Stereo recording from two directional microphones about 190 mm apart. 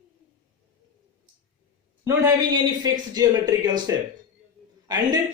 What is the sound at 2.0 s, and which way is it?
Speech, 15° right (ahead or behind).